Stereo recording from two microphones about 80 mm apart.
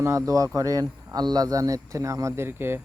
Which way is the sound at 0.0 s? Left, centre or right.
Right.